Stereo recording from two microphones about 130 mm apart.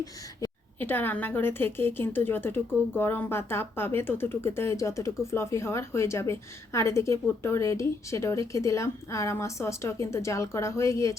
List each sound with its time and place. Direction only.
0.0 s a woman's voice: 25° left (ahead or behind)
0.8 s a woman's voice: 15° left (ahead or behind)